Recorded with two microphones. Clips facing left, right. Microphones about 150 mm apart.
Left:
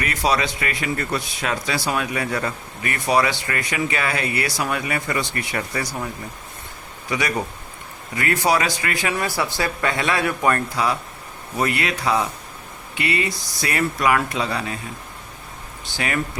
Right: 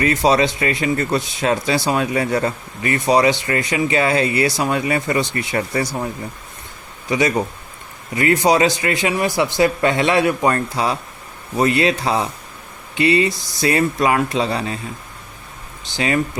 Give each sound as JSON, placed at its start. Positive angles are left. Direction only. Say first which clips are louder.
{"t": 0.0, "sound": "speech", "louder": "right 6 dB", "side_deg": -25}
{"t": 7.1, "sound": "speech", "louder": "right 6 dB", "side_deg": -20}
{"t": 16.0, "sound": "speech", "louder": "right 6 dB", "side_deg": -25}